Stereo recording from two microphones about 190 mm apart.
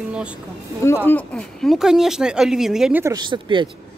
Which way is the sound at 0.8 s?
10° left (ahead or behind).